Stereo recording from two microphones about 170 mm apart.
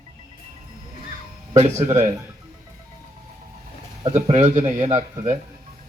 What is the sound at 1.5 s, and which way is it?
Speech, 40° right (ahead or behind).